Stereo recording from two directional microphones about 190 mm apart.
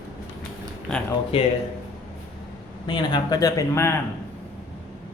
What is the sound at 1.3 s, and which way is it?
Speech, 30° left (ahead or behind).